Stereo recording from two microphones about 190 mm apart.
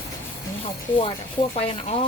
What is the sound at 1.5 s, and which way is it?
Speech, 30° left (ahead or behind).